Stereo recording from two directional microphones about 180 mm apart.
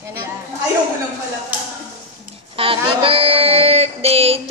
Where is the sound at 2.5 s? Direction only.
30° right (ahead or behind).